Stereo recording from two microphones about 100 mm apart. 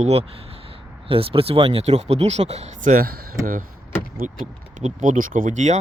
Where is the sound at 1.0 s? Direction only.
70° right (ahead or behind); by 2.7 s 90° right.